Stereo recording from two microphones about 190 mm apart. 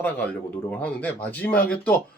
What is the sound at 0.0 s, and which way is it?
Speech, 10° left (ahead or behind).